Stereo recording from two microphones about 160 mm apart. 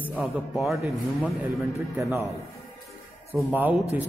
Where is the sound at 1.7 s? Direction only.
15° right (ahead or behind).